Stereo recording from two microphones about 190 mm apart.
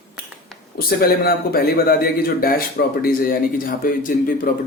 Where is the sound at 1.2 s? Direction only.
55° left (ahead or behind).